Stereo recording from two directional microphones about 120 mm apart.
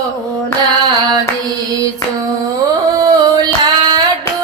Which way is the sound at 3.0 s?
30° right (ahead or behind).